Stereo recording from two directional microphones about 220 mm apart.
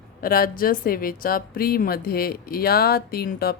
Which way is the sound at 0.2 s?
40° left (ahead or behind).